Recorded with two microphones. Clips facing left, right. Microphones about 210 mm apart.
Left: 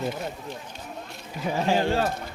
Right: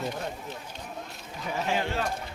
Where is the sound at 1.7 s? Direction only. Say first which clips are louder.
Left 7 dB; 35° left (ahead or behind).